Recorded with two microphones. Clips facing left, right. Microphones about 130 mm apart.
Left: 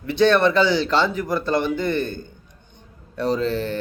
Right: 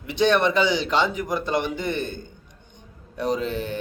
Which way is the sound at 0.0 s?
15° right (ahead or behind).